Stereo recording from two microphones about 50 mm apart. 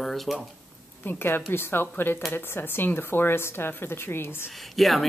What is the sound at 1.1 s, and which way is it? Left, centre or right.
A woman's voice, left.